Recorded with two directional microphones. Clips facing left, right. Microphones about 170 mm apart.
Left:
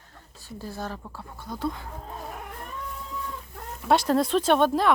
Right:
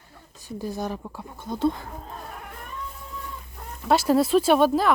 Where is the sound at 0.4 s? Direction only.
15° right (ahead or behind).